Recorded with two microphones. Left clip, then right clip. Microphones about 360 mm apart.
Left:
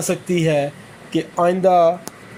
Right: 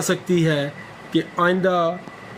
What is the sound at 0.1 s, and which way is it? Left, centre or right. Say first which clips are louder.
A man's voice: left 2 dB; centre.